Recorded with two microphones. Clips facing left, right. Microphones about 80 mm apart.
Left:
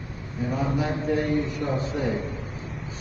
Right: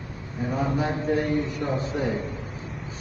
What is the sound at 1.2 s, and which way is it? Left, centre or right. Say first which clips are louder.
A man's voice: even; right.